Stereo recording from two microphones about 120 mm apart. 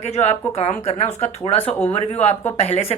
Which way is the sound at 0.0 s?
65° left (ahead or behind).